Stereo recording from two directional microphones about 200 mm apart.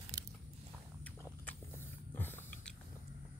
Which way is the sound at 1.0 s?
10° left (ahead or behind).